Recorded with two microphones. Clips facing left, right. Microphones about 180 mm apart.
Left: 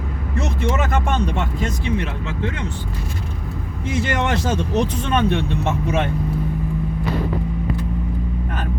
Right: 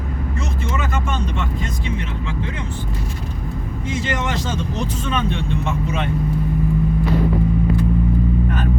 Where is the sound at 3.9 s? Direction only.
60° left (ahead or behind).